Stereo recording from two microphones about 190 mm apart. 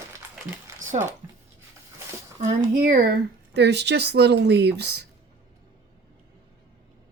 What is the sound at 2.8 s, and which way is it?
Speech, 50° right (ahead or behind).